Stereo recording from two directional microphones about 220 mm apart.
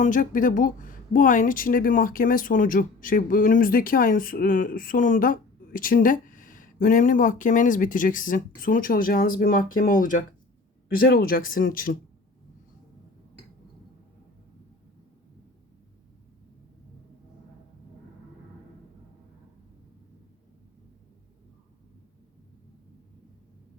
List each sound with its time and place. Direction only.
0.0 s speech: 35° left (ahead or behind)